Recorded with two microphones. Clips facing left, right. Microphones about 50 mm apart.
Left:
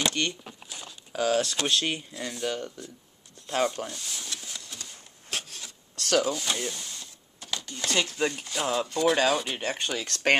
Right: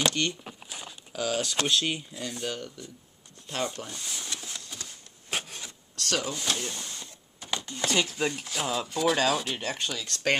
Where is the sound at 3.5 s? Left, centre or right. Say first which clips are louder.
Left 5 dB; centre.